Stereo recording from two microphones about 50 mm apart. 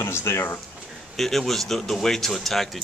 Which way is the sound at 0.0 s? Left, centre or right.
Left.